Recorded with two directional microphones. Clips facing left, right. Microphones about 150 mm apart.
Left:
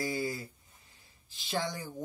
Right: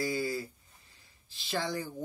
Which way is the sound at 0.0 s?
20° left (ahead or behind).